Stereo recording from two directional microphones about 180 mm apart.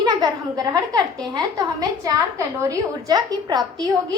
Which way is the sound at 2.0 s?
15° right (ahead or behind).